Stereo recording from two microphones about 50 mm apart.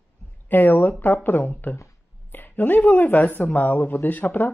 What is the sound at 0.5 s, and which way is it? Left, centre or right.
Speech, left.